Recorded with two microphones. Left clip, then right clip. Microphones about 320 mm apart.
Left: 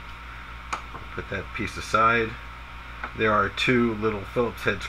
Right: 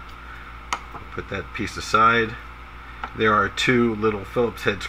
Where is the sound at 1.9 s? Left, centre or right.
Centre.